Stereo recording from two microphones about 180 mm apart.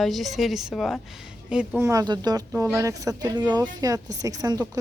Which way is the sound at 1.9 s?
20° right (ahead or behind).